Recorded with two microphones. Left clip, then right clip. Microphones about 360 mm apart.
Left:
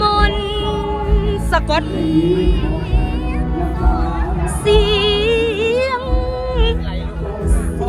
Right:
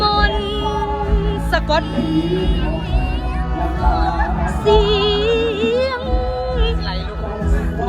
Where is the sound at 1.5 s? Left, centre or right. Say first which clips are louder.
Even; centre.